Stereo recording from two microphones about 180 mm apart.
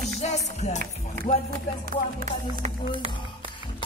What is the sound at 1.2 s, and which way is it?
Speech, 55° right (ahead or behind).